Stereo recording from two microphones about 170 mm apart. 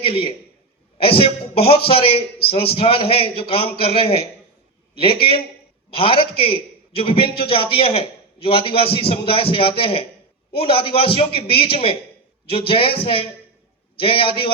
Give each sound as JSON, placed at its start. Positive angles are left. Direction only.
{"t": 0.0, "sound": "a man's voice", "side_deg": 35}
{"t": 5.9, "sound": "a man's voice", "side_deg": 30}